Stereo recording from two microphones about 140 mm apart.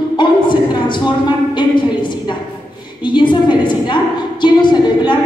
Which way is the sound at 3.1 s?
35° left (ahead or behind).